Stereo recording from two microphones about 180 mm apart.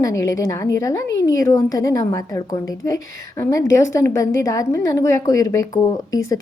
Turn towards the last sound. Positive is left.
turn(degrees=20)  # may be behind; listen again after turning